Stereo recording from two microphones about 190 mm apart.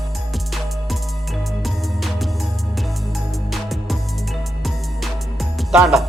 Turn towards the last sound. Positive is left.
turn(degrees=0)  # may be behind; listen again after turning